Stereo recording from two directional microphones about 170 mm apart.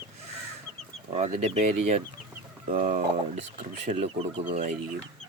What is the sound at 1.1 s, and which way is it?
Speech, 45° right (ahead or behind).